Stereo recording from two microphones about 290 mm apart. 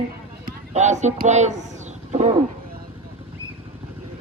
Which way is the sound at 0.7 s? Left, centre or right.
Right.